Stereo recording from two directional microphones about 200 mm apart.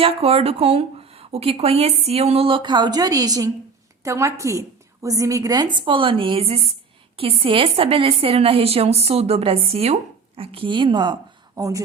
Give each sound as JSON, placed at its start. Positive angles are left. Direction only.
{"t": 0.0, "sound": "a woman's voice", "side_deg": -30}